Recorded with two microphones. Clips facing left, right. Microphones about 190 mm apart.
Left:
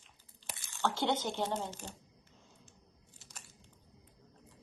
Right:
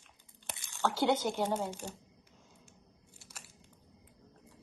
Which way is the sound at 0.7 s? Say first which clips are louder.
Right 3 dB; 15° right (ahead or behind).